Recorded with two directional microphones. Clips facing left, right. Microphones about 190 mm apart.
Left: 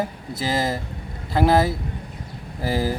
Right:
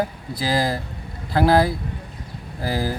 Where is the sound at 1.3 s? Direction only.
Centre (ahead or behind).